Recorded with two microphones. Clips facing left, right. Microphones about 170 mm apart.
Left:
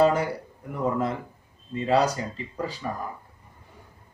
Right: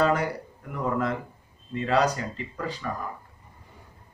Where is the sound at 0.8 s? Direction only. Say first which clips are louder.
Left 1 dB; 25° left (ahead or behind).